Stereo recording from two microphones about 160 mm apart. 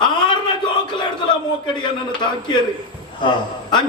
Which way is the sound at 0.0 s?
30° left (ahead or behind).